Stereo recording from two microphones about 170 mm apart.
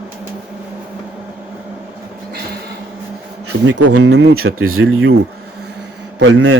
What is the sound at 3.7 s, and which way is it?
Speech, 90° right.